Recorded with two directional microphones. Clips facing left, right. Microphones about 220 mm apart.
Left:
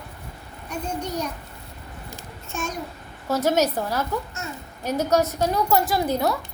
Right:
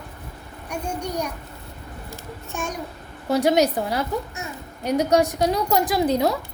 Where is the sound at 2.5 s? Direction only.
15° right (ahead or behind).